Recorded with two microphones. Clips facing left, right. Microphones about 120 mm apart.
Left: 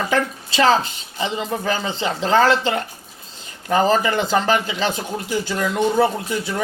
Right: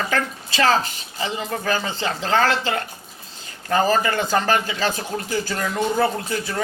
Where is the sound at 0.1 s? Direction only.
25° left (ahead or behind).